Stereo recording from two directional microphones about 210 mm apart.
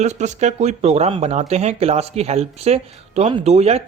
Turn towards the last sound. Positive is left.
turn(degrees=-30)  # may be behind; listen again after turning